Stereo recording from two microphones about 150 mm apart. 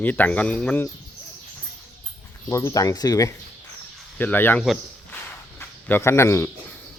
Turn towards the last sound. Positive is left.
turn(degrees=15)  # may be behind; listen again after turning